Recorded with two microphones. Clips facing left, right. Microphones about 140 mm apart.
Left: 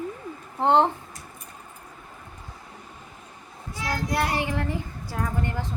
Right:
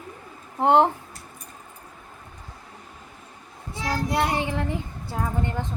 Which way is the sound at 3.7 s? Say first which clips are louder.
Right 2 dB; 25° right (ahead or behind).